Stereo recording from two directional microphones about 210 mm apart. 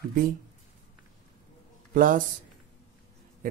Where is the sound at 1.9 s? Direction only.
40° right (ahead or behind).